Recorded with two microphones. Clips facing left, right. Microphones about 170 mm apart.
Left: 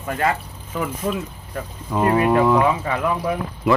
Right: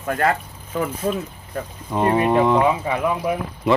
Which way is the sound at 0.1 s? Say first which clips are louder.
Right 1 dB; 55° right (ahead or behind).